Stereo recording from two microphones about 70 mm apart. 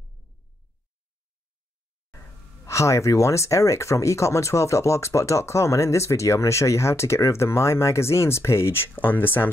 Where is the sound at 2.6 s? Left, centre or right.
Left.